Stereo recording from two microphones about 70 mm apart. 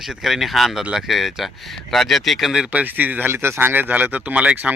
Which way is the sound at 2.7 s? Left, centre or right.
Right.